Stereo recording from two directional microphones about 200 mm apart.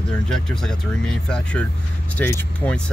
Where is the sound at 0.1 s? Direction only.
5° left (ahead or behind).